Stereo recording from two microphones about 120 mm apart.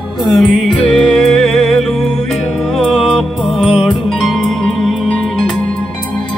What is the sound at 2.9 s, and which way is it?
Music, 5° right (ahead or behind).